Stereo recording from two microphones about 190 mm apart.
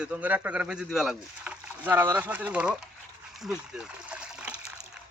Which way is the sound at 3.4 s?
5° right (ahead or behind).